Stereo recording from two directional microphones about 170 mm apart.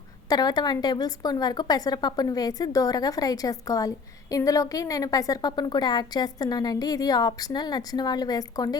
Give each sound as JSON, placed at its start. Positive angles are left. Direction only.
{"t": 0.3, "sound": "a woman's voice", "side_deg": 25}